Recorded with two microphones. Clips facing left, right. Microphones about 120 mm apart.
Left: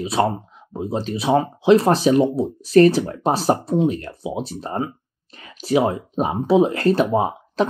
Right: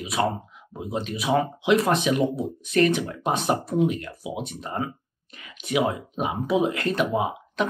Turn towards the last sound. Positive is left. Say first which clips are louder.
# left 5 dB
turn(degrees=35)  # may be behind; listen again after turning